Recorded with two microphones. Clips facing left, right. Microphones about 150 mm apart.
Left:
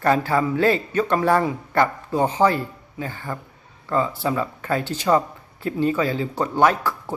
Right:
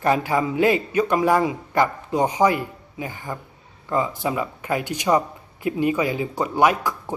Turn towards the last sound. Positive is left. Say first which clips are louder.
# even
turn(degrees=-15)  # may be behind; listen again after turning